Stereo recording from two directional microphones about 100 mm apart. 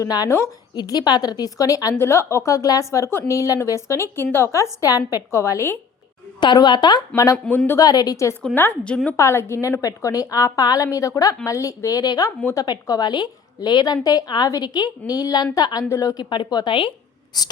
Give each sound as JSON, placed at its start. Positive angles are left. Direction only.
{"t": 0.0, "sound": "a woman's voice", "side_deg": 40}
{"t": 0.3, "sound": "a woman's voice", "side_deg": 30}
{"t": 0.8, "sound": "a woman's voice", "side_deg": 45}
{"t": 6.4, "sound": "a woman's voice", "side_deg": 50}
{"t": 7.3, "sound": "speech", "side_deg": 15}
{"t": 7.8, "sound": "a woman's voice", "side_deg": 40}
{"t": 16.3, "sound": "a woman's voice", "side_deg": 45}